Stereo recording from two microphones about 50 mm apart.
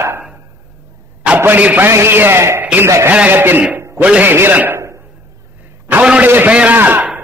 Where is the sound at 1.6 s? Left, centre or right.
Right.